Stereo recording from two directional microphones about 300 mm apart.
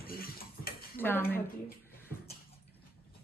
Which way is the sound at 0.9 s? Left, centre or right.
Centre.